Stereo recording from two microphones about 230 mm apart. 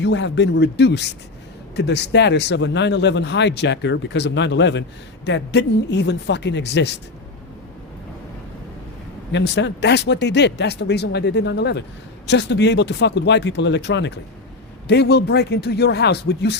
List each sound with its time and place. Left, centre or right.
0.0 s speech: left
9.3 s speech: left